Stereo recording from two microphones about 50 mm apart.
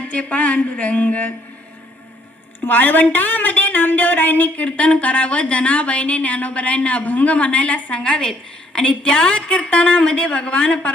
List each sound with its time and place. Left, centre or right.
0.1 s a woman's voice: left
2.6 s a woman's voice: left